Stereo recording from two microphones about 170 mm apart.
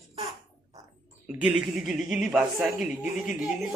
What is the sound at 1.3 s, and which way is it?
Speech, 10° right (ahead or behind).